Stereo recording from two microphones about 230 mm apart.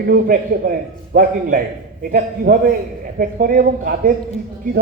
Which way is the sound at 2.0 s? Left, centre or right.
Right.